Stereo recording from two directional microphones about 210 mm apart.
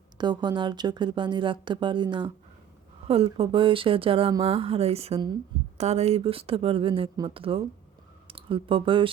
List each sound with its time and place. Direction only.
0.2 s speech: 20° right (ahead or behind)